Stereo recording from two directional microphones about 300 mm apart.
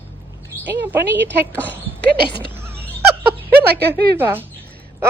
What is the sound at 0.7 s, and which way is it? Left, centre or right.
Speech, centre.